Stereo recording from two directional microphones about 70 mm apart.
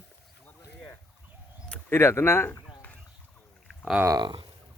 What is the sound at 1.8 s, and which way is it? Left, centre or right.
Speech, left.